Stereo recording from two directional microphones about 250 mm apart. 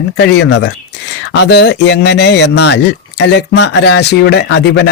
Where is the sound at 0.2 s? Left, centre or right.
Left.